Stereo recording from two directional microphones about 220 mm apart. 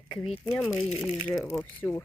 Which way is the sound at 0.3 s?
Centre (ahead or behind).